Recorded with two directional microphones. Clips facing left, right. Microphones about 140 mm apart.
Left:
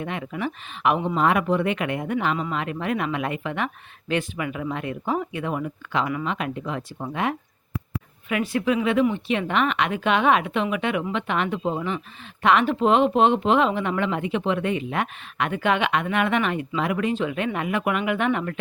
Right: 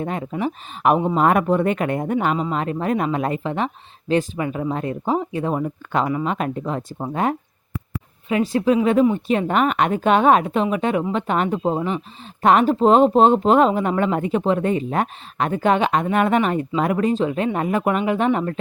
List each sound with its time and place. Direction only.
0.0 s speech: 35° right (ahead or behind)